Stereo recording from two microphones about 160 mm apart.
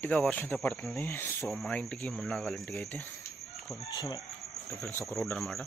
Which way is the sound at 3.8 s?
20° left (ahead or behind).